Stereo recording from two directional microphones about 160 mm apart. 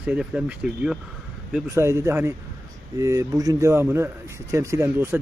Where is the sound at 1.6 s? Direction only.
15° right (ahead or behind).